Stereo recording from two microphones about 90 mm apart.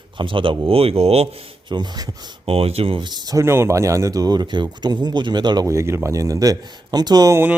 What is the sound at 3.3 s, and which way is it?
Speech, 30° right (ahead or behind).